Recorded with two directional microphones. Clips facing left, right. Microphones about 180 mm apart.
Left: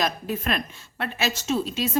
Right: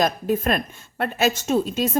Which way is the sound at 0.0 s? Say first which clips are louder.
Right 6 dB; 45° right (ahead or behind).